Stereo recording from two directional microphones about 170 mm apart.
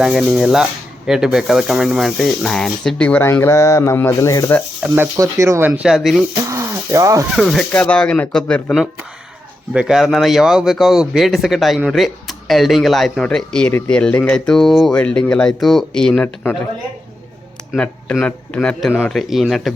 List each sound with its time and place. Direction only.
0.0 s a man's voice: centre (ahead or behind); by 4.6 s 15° left (ahead or behind)
4.8 s speech: 15° right (ahead or behind)
6.5 s a sound: 20° right (ahead or behind)
7.3 s a man's voice: centre (ahead or behind)
17.7 s a man's voice: 5° left (ahead or behind)